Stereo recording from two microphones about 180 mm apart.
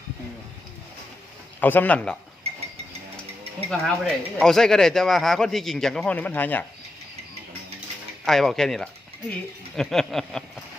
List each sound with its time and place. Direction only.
1.6 s speech: 10° left (ahead or behind)
3.7 s speech: 5° left (ahead or behind)
8.2 s speech: centre (ahead or behind)